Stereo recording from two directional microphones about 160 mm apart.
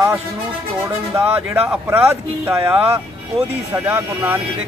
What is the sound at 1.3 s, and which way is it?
Speech, 10° right (ahead or behind).